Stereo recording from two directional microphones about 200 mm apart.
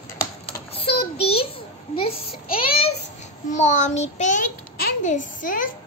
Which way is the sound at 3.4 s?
35° left (ahead or behind).